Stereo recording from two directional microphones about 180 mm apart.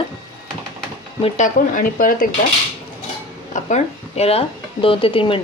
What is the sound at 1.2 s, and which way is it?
Speech, 40° left (ahead or behind).